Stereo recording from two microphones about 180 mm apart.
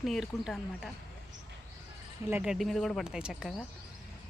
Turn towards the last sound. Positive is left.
turn(degrees=-5)  # may be behind; listen again after turning